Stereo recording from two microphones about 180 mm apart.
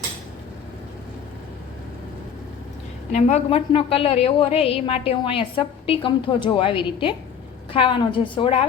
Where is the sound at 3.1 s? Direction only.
40° left (ahead or behind).